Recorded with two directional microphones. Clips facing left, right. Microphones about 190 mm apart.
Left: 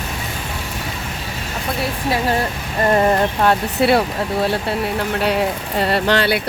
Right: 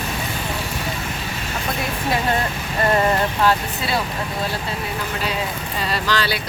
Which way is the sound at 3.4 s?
65° left (ahead or behind).